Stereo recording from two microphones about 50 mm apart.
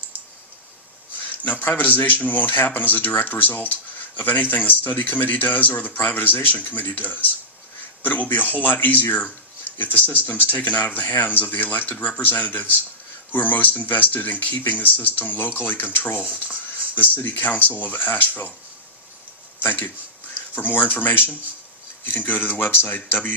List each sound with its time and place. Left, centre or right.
1.6 s a man's voice: left
19.6 s a man's voice: left